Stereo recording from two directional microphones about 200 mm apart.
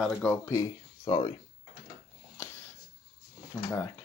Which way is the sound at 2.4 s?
15° left (ahead or behind).